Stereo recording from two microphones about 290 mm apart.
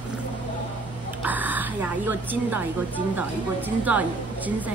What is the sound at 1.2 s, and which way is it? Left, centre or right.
A woman's voice, centre.